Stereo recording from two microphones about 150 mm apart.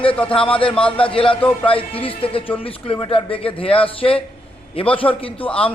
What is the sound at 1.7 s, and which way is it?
A man's voice, 35° left (ahead or behind).